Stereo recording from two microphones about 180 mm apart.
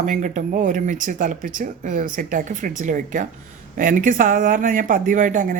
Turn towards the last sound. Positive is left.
turn(degrees=-45)  # may be behind; listen again after turning